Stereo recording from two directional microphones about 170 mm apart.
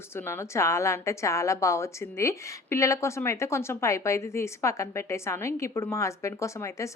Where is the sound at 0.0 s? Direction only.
15° left (ahead or behind).